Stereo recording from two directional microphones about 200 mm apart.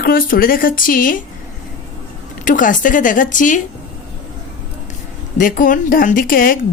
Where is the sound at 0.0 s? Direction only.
45° left (ahead or behind).